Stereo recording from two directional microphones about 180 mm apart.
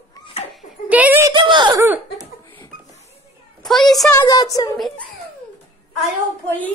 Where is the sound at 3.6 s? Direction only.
Centre (ahead or behind).